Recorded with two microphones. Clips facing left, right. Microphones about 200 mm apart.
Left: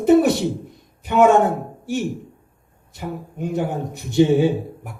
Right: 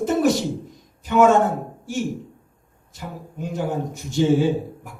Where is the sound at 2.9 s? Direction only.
60° left (ahead or behind).